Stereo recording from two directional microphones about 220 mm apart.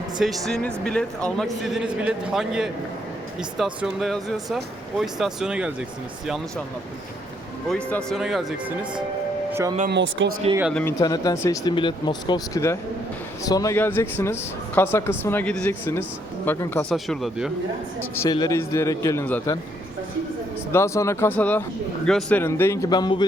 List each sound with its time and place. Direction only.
0.2 s speech: centre (ahead or behind)
7.7 s speech: 5° left (ahead or behind)
9.5 s speech: 10° right (ahead or behind)
9.9 s speech: 55° right (ahead or behind)
10.6 s speech: centre (ahead or behind)
10.8 s speech: 15° left (ahead or behind); by 17.5 s centre (ahead or behind)
18.1 s speech: 15° left (ahead or behind)
20.7 s speech: 15° left (ahead or behind)